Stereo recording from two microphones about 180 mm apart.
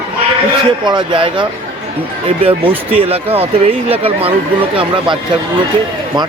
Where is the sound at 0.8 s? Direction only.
25° right (ahead or behind).